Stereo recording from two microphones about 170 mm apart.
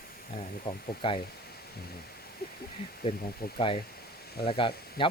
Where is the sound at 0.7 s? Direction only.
30° left (ahead or behind).